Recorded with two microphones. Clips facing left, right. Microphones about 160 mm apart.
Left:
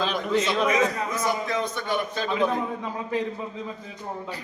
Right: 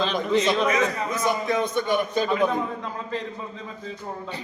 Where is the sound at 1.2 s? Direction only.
20° right (ahead or behind).